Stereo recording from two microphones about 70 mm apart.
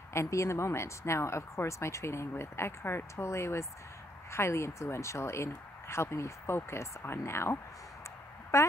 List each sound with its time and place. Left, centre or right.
0.1 s a woman's voice: left